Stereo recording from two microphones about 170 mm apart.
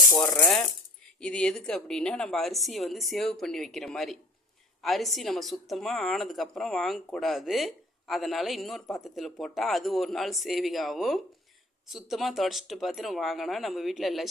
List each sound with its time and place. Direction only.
0.1 s rattle: 15° left (ahead or behind)
1.2 s a woman's voice: 5° left (ahead or behind)